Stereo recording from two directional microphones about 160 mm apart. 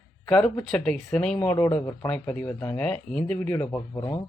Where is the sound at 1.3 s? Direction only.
15° left (ahead or behind).